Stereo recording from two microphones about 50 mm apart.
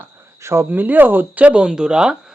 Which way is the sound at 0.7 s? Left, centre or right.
Right.